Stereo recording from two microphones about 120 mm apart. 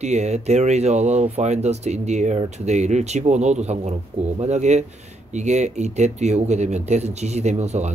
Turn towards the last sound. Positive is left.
turn(degrees=-65)  # may be behind; listen again after turning